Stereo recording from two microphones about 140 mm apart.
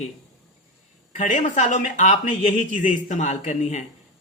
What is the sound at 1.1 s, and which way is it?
Speech, 60° left (ahead or behind).